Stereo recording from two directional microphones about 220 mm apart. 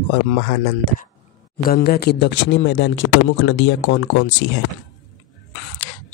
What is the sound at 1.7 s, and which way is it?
Speech, 45° left (ahead or behind).